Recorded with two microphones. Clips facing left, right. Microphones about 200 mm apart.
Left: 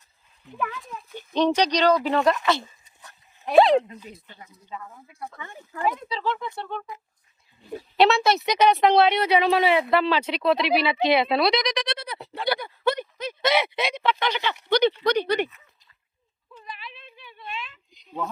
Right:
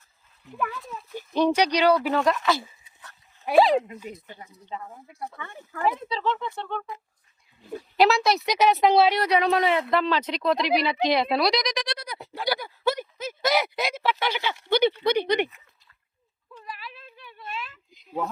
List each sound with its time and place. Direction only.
0.4 s speech: 5° right (ahead or behind)
4.7 s speech: 30° right (ahead or behind)
5.4 s speech: 15° left (ahead or behind)
5.9 s speech: 5° right (ahead or behind)
6.2 s speech: 10° left (ahead or behind)
11.1 s bleat: centre (ahead or behind)
14.7 s speech: 10° right (ahead or behind)
16.6 s a sound: centre (ahead or behind)